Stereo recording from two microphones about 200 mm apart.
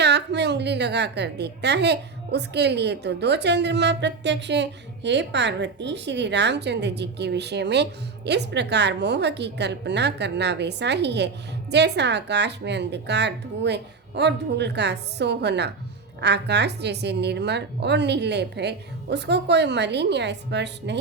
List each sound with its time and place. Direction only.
0.0 s a woman's voice: 60° right (ahead or behind)